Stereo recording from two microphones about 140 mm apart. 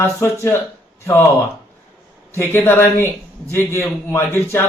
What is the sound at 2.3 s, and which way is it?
Speech, 15° left (ahead or behind).